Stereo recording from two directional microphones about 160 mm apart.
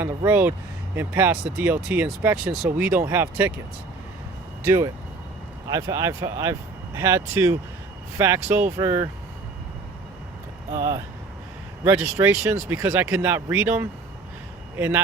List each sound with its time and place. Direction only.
0.3 s speech: 10° right (ahead or behind)
4.6 s speech: 15° right (ahead or behind)
11.9 s speech: 15° right (ahead or behind)